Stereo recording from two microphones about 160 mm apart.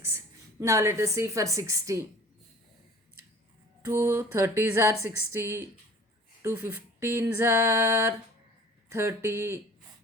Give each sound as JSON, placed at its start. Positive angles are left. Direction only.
{"t": 0.6, "sound": "a woman's voice", "side_deg": -20}
{"t": 3.8, "sound": "a woman's voice", "side_deg": -15}